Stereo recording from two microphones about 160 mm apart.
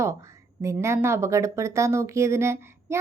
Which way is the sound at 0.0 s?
20° right (ahead or behind).